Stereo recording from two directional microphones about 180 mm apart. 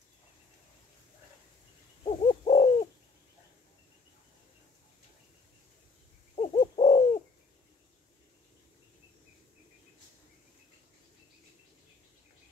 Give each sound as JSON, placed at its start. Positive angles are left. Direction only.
{"t": 2.0, "sound": "owl", "side_deg": 35}
{"t": 6.3, "sound": "owl", "side_deg": 35}